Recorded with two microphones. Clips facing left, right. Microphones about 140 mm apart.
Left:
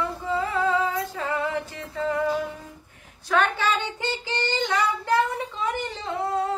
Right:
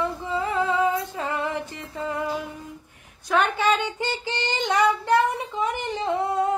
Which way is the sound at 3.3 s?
15° right (ahead or behind).